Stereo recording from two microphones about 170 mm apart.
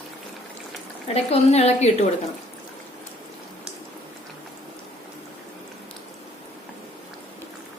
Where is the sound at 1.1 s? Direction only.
35° left (ahead or behind).